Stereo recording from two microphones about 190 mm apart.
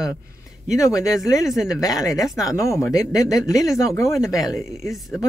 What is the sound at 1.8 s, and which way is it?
Speech, 20° left (ahead or behind).